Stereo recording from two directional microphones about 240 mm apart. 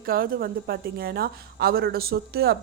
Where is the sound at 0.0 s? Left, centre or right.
Right.